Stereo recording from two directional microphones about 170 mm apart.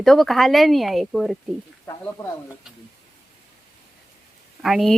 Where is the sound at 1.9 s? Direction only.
20° left (ahead or behind).